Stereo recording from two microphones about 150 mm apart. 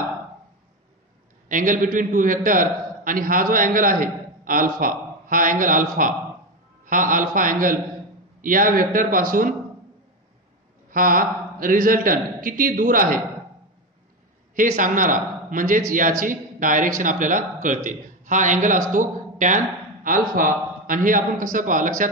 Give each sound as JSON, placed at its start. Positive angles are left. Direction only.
{"t": 1.5, "sound": "a man's voice", "side_deg": -60}
{"t": 6.9, "sound": "a man's voice", "side_deg": -60}
{"t": 10.9, "sound": "a man's voice", "side_deg": -70}
{"t": 14.5, "sound": "a man's voice", "side_deg": -60}